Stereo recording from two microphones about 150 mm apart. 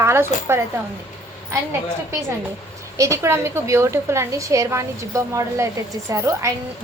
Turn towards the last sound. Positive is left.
turn(degrees=-20)  # may be behind; listen again after turning